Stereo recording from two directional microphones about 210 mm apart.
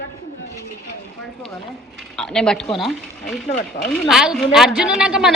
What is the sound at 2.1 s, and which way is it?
A woman's voice, 5° left (ahead or behind).